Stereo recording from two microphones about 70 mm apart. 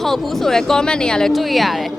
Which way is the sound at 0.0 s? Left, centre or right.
Centre.